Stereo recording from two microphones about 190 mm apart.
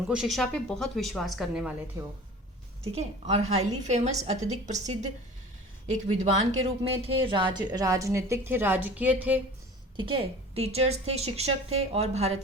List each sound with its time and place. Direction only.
0.1 s speech: centre (ahead or behind)
2.0 s speech: 15° right (ahead or behind)
2.9 s a woman's voice: 35° right (ahead or behind)
5.9 s speech: 35° right (ahead or behind); by 9.4 s 10° right (ahead or behind)
10.0 s a woman's voice: 25° right (ahead or behind)